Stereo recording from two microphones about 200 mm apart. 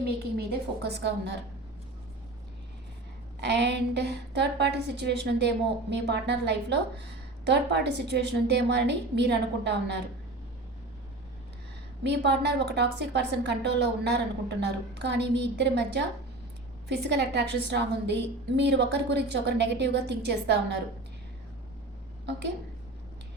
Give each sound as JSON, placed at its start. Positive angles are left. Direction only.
{"t": 0.3, "sound": "a woman's voice", "side_deg": -55}
{"t": 3.4, "sound": "a woman's voice", "side_deg": -60}
{"t": 12.0, "sound": "a woman's voice", "side_deg": -55}